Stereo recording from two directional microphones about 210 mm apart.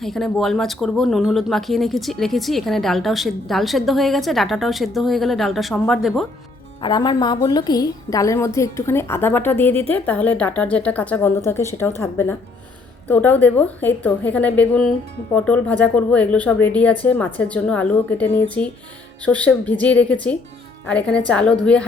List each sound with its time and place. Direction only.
0.0 s speech: centre (ahead or behind)
6.8 s a woman's voice: 20° left (ahead or behind); by 21.8 s 5° left (ahead or behind)